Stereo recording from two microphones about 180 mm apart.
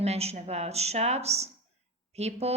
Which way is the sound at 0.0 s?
35° right (ahead or behind).